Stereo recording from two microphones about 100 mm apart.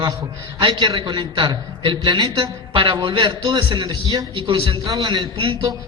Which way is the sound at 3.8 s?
40° right (ahead or behind).